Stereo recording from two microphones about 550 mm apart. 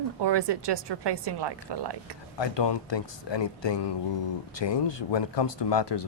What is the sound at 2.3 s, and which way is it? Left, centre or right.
Speech, left.